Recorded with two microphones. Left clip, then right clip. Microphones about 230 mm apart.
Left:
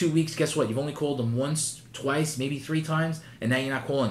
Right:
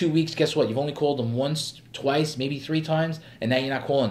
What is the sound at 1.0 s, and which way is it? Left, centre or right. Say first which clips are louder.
Speech: right 6 dB; right.